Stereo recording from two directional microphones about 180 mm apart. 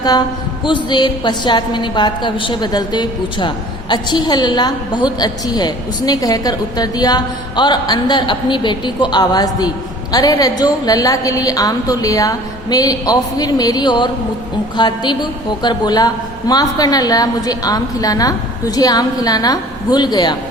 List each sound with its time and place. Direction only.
0.6 s a woman's voice: 25° left (ahead or behind)